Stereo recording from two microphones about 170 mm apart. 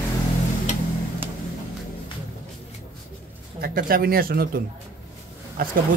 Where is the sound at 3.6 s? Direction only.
60° right (ahead or behind).